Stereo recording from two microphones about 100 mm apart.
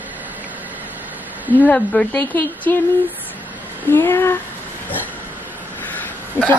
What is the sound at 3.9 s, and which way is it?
Speech, 25° left (ahead or behind).